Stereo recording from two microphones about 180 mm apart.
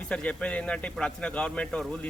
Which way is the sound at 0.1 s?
5° left (ahead or behind).